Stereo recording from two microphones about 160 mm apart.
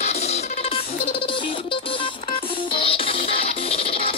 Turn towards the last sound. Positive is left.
turn(degrees=35)  # may be behind; listen again after turning